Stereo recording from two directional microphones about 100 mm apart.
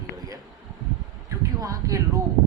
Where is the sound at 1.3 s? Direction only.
35° right (ahead or behind).